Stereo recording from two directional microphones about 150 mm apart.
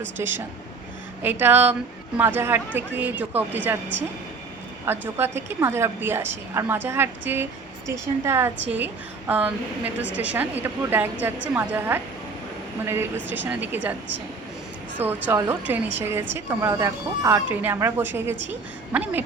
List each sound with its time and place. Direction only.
0.2 s a woman's voice: 15° right (ahead or behind)
4.9 s a woman's voice: 15° right (ahead or behind)
14.9 s a woman's voice: 15° right (ahead or behind)